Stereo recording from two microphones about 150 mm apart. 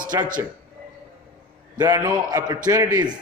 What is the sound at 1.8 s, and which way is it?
Speech, 20° right (ahead or behind).